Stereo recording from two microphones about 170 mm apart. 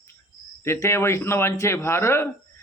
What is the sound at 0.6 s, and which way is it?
A man's voice, 15° left (ahead or behind).